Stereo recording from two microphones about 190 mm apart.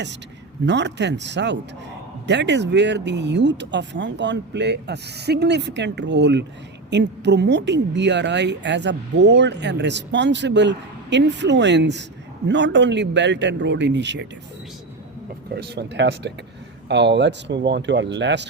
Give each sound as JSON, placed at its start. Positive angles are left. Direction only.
{"t": 0.6, "sound": "a woman's voice", "side_deg": -65}
{"t": 15.5, "sound": "a woman's voice", "side_deg": -60}